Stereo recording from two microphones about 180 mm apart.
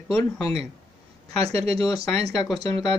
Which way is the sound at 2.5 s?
20° left (ahead or behind).